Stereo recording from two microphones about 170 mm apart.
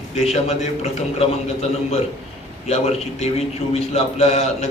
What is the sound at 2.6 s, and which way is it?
A man's voice, 40° left (ahead or behind).